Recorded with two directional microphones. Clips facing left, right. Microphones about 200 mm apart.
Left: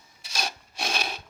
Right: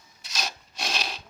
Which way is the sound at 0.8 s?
55° left (ahead or behind).